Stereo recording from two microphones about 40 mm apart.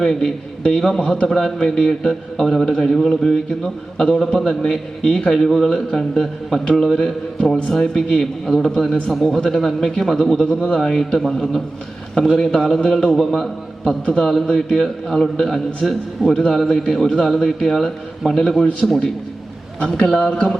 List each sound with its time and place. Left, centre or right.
0.0 s a man's voice: centre
20.1 s speech: centre